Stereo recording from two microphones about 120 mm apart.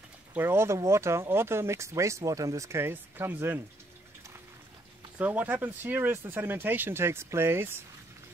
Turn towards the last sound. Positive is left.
turn(degrees=-20)  # may be behind; listen again after turning